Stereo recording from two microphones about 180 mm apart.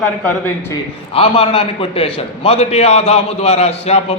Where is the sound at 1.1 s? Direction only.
30° left (ahead or behind).